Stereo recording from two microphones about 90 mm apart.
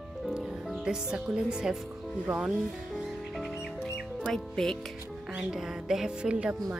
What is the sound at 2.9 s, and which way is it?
Music, centre (ahead or behind).